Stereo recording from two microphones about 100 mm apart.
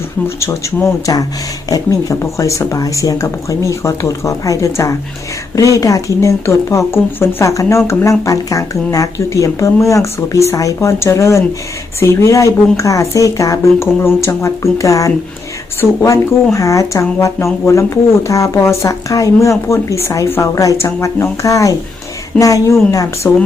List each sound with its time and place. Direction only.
0.3 s speech: 30° left (ahead or behind)